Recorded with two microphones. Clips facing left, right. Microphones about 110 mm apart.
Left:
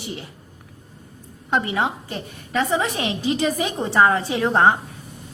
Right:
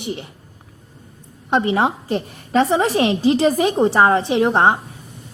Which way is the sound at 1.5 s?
25° right (ahead or behind).